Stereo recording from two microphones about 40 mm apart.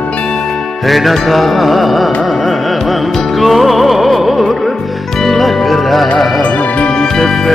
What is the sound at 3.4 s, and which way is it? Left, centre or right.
Music, centre.